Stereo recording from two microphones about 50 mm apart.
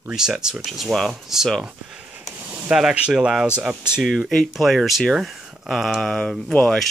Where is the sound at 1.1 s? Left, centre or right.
Centre.